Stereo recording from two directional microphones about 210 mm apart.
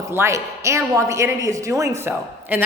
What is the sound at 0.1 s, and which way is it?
A woman's voice, 15° right (ahead or behind).